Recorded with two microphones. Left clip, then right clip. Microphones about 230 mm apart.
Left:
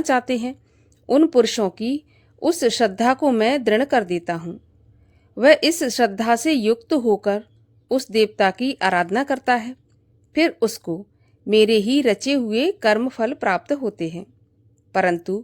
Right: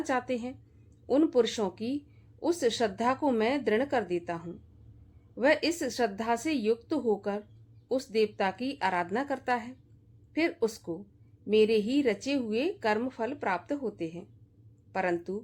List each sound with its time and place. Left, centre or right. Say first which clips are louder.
0.0 s speech: left 11 dB; left